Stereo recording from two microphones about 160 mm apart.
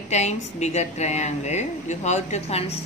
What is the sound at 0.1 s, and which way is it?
A woman's voice, 45° left (ahead or behind).